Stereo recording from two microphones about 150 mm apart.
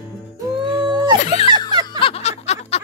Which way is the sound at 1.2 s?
45° left (ahead or behind).